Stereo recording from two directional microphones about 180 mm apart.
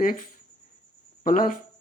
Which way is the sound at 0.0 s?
50° left (ahead or behind).